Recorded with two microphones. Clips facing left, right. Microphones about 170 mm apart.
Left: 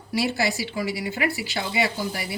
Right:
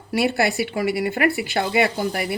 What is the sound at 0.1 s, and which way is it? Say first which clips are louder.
Speech: right 4 dB; 55° right (ahead or behind).